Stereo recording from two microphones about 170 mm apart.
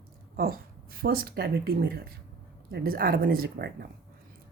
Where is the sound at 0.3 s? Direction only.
60° right (ahead or behind).